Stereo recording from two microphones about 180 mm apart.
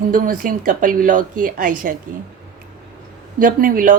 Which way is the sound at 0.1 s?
50° right (ahead or behind).